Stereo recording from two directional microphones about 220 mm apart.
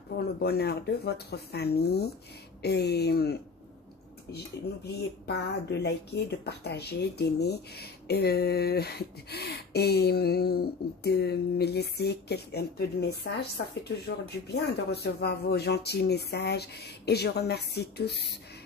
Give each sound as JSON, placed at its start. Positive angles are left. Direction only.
{"t": 0.4, "sound": "speech", "side_deg": 45}
{"t": 5.2, "sound": "speech", "side_deg": 50}